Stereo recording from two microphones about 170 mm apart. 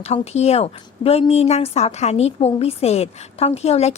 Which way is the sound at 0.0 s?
40° left (ahead or behind).